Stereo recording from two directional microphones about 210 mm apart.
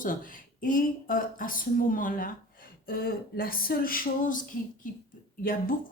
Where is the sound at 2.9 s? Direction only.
45° left (ahead or behind).